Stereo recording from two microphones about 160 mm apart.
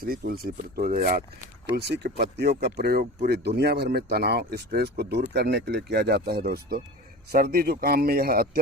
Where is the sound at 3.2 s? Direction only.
90° right.